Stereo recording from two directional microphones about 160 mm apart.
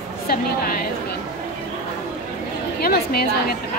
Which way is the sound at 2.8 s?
70° left (ahead or behind).